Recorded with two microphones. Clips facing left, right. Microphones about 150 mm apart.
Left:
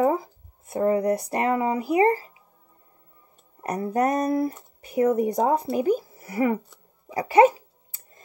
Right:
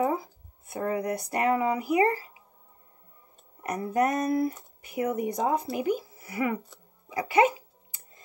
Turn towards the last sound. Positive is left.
turn(degrees=35)  # may be behind; listen again after turning